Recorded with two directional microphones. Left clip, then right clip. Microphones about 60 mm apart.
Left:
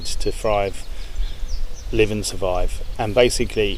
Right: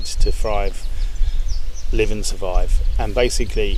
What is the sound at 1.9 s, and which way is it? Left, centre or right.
Speech, left.